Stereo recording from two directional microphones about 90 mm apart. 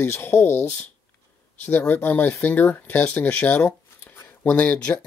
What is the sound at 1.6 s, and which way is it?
Speech, 20° left (ahead or behind).